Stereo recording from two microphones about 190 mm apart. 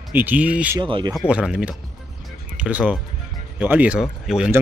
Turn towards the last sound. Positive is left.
turn(degrees=-5)  # may be behind; listen again after turning